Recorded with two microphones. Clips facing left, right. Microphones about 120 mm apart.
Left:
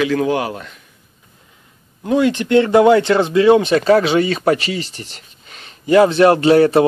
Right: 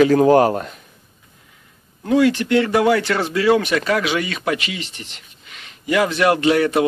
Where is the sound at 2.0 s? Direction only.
20° left (ahead or behind).